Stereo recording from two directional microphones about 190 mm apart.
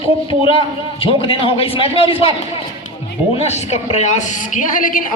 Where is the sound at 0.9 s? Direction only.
30° left (ahead or behind).